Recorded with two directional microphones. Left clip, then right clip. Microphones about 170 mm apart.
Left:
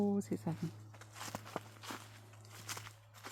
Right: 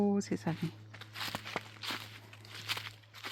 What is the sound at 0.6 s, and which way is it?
Walk, 10° right (ahead or behind).